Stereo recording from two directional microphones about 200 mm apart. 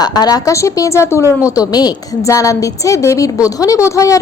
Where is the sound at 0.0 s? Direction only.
20° left (ahead or behind).